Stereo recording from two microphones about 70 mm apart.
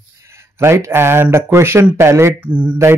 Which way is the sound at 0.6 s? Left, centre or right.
Right.